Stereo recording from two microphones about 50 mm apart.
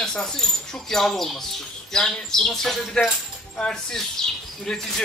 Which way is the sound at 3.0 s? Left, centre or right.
Centre.